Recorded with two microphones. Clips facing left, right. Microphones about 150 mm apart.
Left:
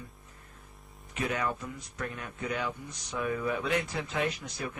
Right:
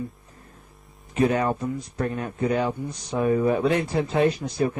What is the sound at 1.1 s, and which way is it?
Speech, 35° right (ahead or behind).